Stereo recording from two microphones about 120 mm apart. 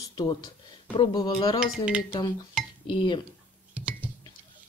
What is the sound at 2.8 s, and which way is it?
Speech, 45° left (ahead or behind).